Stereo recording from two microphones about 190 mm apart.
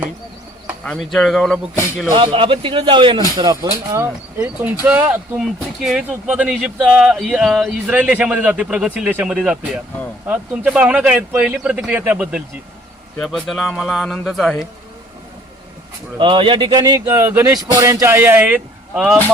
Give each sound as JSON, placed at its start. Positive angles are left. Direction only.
{"t": 0.9, "sound": "a man's voice", "side_deg": 0}
{"t": 2.0, "sound": "a man's voice", "side_deg": -25}
{"t": 16.1, "sound": "a man's voice", "side_deg": -25}